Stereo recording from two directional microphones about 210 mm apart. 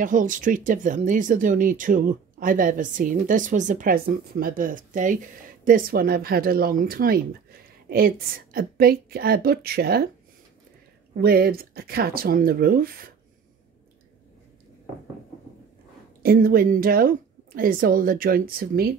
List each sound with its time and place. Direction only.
0.0 s speech: 40° right (ahead or behind)
8.5 s a woman's voice: 45° right (ahead or behind)
11.1 s a woman's voice: 45° right (ahead or behind)
16.2 s a woman's voice: 45° right (ahead or behind)